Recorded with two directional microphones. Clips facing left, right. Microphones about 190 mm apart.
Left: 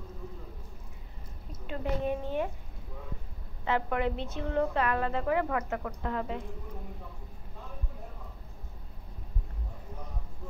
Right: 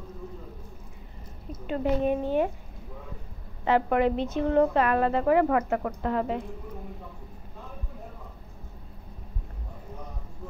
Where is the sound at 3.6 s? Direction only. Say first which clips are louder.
Right 7 dB; 65° right (ahead or behind).